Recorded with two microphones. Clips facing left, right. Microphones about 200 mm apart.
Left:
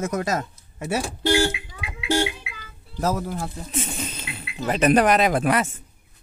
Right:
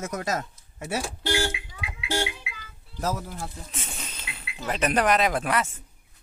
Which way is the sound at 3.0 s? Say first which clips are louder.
Left 5 dB; 90° left.